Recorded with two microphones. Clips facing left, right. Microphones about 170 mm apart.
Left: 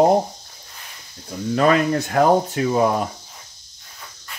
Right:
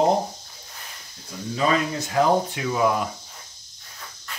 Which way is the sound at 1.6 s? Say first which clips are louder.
Left 6 dB; 65° left (ahead or behind).